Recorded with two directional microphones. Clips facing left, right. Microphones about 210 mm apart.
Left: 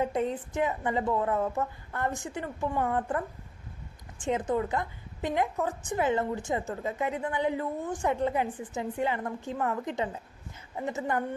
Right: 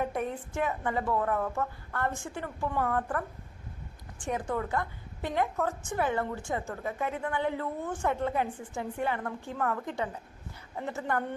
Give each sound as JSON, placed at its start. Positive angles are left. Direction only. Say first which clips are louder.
{"t": 0.0, "sound": "a woman's voice", "louder": "left 3 dB", "side_deg": 20}